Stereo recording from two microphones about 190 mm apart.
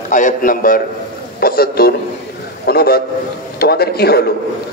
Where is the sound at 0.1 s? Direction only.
45° left (ahead or behind).